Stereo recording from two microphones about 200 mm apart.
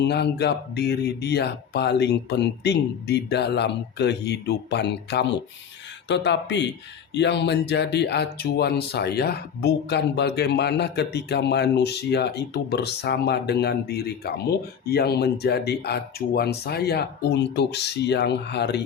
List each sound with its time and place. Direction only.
0.0 s speech: 55° left (ahead or behind)